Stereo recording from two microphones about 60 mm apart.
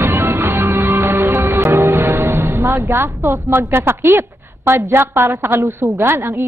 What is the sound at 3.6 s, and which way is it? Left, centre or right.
A woman's voice, right.